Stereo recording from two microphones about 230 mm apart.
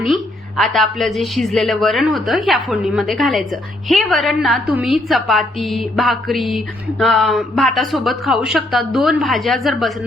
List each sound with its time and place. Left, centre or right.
0.0 s a woman's voice: centre